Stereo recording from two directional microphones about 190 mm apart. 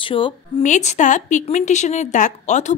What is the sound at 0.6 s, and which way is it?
Speech, 40° left (ahead or behind).